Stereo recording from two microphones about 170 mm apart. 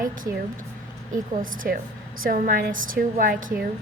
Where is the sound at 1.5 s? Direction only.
55° right (ahead or behind).